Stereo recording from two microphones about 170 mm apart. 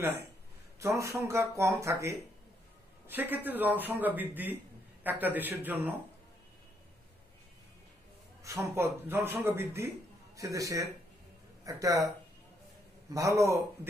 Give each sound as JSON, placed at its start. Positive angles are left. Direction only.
{"t": 0.7, "sound": "a man's voice", "side_deg": -15}
{"t": 8.5, "sound": "a man's voice", "side_deg": -15}
{"t": 13.1, "sound": "speech", "side_deg": -20}